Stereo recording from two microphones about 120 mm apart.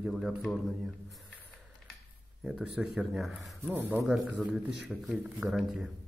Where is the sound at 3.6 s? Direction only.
15° right (ahead or behind).